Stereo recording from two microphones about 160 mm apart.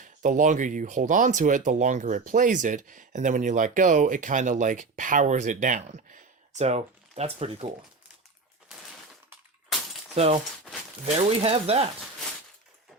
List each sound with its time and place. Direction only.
0.0 s speech: 50° right (ahead or behind)
9.7 s breaking: centre (ahead or behind)
10.2 s speech: 40° right (ahead or behind)